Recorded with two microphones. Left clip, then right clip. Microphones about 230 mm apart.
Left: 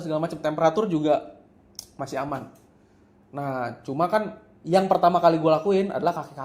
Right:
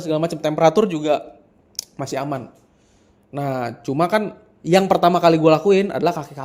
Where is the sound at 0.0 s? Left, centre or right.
Right.